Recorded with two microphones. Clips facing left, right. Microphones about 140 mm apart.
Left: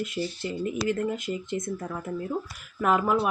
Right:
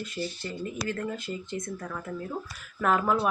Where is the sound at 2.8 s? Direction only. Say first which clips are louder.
Left 1 dB; 5° left (ahead or behind).